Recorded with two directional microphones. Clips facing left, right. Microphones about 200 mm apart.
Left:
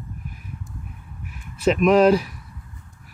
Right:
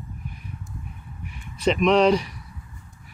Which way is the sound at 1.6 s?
5° left (ahead or behind).